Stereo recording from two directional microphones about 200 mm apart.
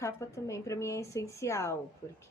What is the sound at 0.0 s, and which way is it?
A woman's voice, 15° left (ahead or behind).